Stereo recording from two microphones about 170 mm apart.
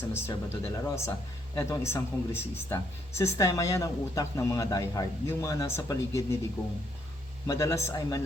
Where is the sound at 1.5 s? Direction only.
15° left (ahead or behind).